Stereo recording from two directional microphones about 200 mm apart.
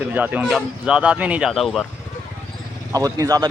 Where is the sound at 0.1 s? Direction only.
10° right (ahead or behind).